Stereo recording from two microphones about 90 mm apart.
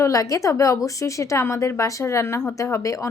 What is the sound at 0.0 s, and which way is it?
A woman's voice, 40° left (ahead or behind).